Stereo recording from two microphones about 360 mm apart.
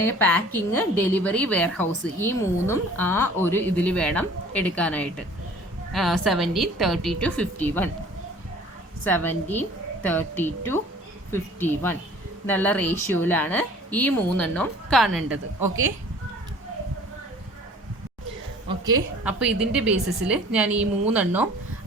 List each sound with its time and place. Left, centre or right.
0.0 s a woman's voice: centre
9.0 s a woman's voice: centre
18.9 s a woman's voice: centre